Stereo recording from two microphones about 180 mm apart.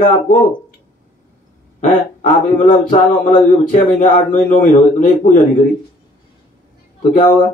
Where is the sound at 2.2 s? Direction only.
45° left (ahead or behind).